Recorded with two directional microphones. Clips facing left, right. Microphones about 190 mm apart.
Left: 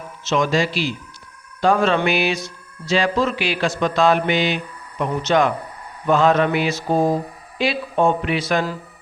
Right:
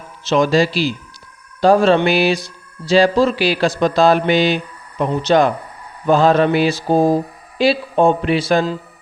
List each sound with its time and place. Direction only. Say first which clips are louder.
0.3 s speech: right 5 dB; 35° right (ahead or behind)